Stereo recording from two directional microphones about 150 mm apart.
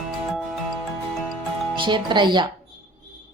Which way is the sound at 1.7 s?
30° right (ahead or behind).